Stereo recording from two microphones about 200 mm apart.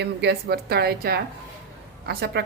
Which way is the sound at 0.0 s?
55° right (ahead or behind).